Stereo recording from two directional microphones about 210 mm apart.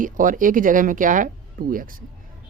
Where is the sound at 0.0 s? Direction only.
40° right (ahead or behind).